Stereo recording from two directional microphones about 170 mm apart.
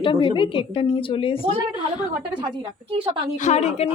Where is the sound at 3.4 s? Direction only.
40° left (ahead or behind).